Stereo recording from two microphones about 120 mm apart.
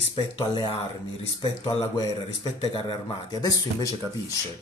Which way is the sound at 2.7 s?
45° left (ahead or behind).